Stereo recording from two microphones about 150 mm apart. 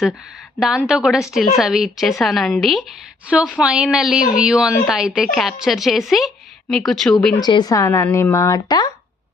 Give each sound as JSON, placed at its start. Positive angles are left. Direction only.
{"t": 0.9, "sound": "a woman's voice", "side_deg": -5}
{"t": 7.3, "sound": "speech", "side_deg": 25}